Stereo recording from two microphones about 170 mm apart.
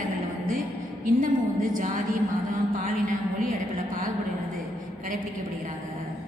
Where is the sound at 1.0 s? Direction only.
50° right (ahead or behind).